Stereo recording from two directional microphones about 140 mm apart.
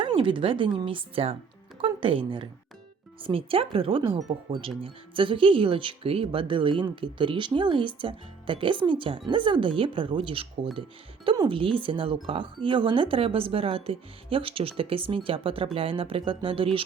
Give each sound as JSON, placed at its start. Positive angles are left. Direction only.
{"t": 0.0, "sound": "speech", "side_deg": -40}